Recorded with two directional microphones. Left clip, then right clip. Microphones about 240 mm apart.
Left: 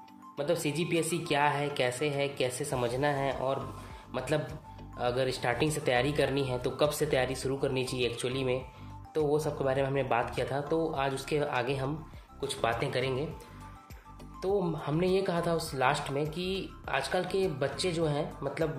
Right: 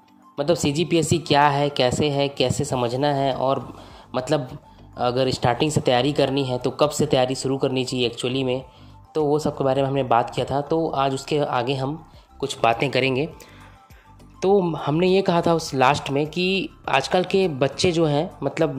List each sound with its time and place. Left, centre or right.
0.4 s speech: right
4.9 s speech: right
14.4 s speech: right